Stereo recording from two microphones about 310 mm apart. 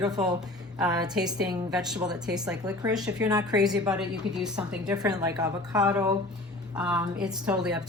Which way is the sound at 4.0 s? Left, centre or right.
Centre.